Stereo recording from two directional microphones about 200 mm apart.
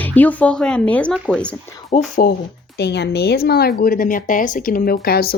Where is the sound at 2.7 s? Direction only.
55° left (ahead or behind).